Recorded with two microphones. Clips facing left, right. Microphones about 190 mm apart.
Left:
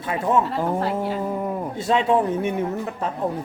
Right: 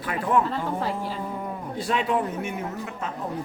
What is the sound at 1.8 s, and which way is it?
Speech, 25° left (ahead or behind).